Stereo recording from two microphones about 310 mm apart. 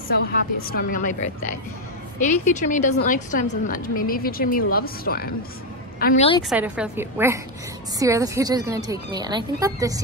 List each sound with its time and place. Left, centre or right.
0.4 s a woman's voice: left
6.5 s speech: centre